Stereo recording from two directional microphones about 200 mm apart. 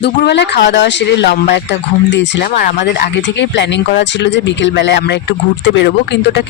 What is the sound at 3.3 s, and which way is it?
Speech, 65° left (ahead or behind).